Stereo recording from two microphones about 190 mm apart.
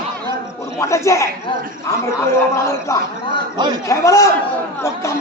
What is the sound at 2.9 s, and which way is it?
Speech, 15° left (ahead or behind).